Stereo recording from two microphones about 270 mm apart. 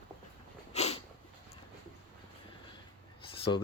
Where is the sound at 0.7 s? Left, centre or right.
Left.